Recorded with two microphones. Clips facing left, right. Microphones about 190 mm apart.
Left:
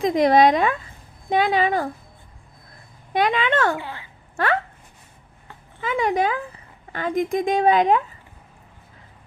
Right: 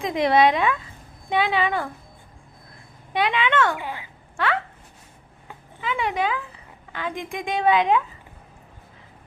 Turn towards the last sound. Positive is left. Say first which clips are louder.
# left 2 dB
turn(degrees=45)  # may be behind; listen again after turning